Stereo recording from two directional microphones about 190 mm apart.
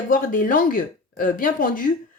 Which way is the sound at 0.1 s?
45° left (ahead or behind).